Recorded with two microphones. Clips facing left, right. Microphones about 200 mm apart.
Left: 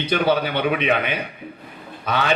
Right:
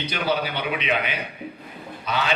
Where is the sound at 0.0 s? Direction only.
55° left (ahead or behind).